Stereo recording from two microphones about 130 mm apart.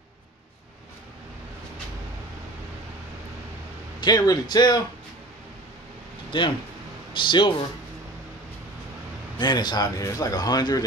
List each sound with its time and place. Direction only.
4.0 s speech: 30° left (ahead or behind)
6.3 s speech: 40° left (ahead or behind)
9.4 s speech: 35° left (ahead or behind)